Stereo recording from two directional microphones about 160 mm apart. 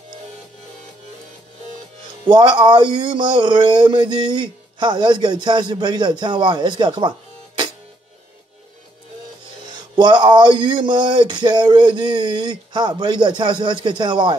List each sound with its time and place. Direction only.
2.2 s speech: 30° right (ahead or behind)
9.9 s speech: 30° right (ahead or behind)